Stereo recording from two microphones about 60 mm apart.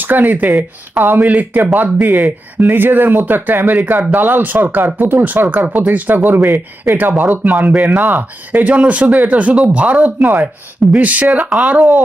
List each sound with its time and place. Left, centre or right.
0.0 s speech: right
6.4 s speech: right
7.2 s speech: right
7.9 s speech: right
11.4 s speech: centre
11.7 s speech: right